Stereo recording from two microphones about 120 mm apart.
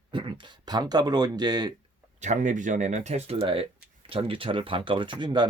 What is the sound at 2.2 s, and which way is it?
Speech, 85° right.